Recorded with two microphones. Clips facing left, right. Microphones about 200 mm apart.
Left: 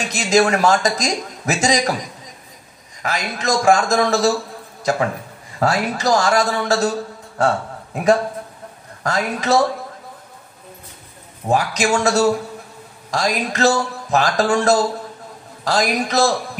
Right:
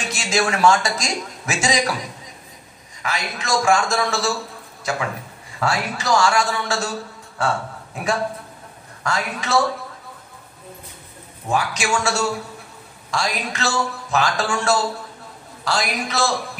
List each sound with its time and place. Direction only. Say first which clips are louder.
0.0 s a man's voice: left 6 dB; 40° left (ahead or behind)
3.0 s a man's voice: left 3 dB; 40° left (ahead or behind)
11.4 s a man's voice: left 4 dB; 40° left (ahead or behind)